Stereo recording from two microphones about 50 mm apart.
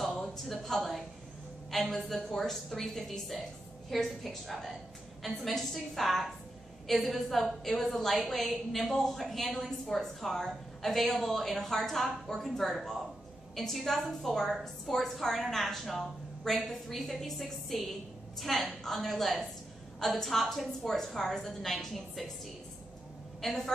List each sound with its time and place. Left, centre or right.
0.5 s a woman's voice: centre
23.4 s a woman's voice: centre